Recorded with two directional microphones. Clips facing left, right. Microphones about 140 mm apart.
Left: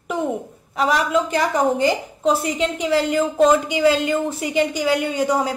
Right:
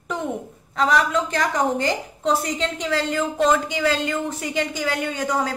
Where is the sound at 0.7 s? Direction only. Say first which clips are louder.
Left 1 dB; 10° left (ahead or behind).